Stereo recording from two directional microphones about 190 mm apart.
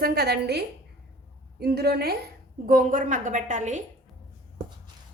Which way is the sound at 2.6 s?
45° right (ahead or behind).